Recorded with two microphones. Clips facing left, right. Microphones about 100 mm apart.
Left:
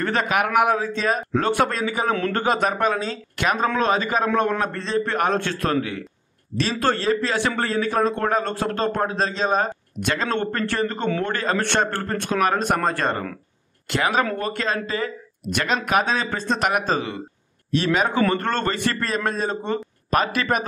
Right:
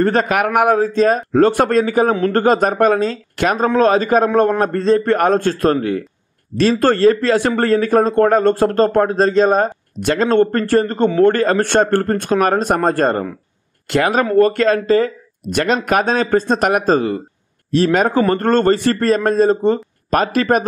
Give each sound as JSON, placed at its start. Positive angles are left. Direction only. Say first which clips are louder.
{"t": 0.0, "sound": "speech", "louder": "right 7 dB", "side_deg": -40}